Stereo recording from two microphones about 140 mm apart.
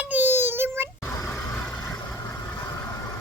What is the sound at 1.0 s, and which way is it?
Vehicle, 20° left (ahead or behind).